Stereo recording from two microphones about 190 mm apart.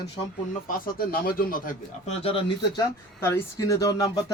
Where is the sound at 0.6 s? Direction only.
45° left (ahead or behind).